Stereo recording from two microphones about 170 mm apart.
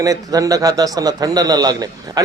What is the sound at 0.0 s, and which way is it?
A man's voice, 20° right (ahead or behind).